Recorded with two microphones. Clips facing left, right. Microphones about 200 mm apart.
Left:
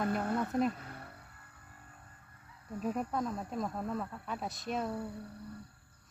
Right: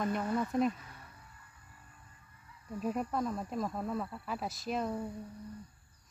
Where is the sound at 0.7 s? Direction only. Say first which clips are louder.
Left 6 dB; 60° left (ahead or behind).